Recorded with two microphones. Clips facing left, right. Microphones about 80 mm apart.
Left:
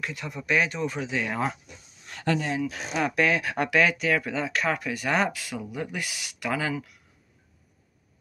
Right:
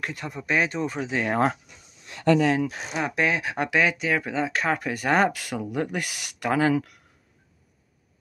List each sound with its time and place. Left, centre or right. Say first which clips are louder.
0.0 s speech: right 2 dB; right
2.4 s speech: right 6 dB; right
2.7 s speech: left 1 dB; right
5.3 s speech: right 5 dB; right
6.7 s speech: right 8 dB; right